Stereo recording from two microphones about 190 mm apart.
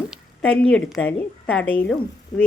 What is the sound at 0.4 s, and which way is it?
A woman's voice, 5° left (ahead or behind).